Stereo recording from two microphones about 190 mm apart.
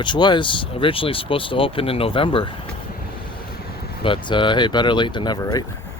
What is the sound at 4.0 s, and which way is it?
Speech, 25° left (ahead or behind).